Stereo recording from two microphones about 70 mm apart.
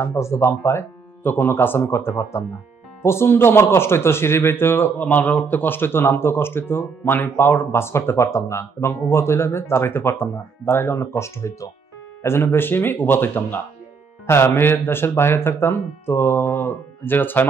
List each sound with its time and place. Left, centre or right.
0.0 s speech: left